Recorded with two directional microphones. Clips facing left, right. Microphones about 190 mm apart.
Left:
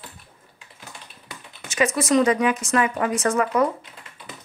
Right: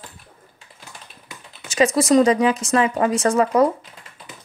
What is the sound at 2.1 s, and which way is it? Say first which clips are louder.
A woman's voice: right 3 dB; 30° right (ahead or behind).